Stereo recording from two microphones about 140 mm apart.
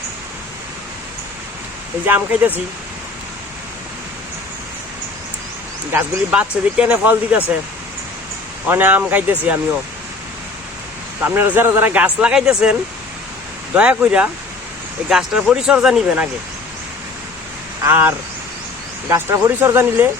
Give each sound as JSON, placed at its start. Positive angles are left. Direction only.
{"t": 2.0, "sound": "speech", "side_deg": -15}
{"t": 5.9, "sound": "speech", "side_deg": -10}
{"t": 8.6, "sound": "speech", "side_deg": -15}
{"t": 11.2, "sound": "speech", "side_deg": -15}
{"t": 13.7, "sound": "speech", "side_deg": -10}
{"t": 17.8, "sound": "speech", "side_deg": -15}